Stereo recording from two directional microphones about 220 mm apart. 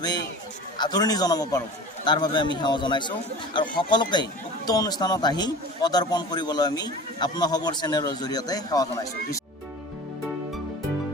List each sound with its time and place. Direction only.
0.8 s speech: 20° left (ahead or behind)